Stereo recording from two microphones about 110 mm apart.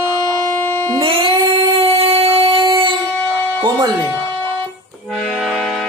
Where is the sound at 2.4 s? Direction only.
55° right (ahead or behind).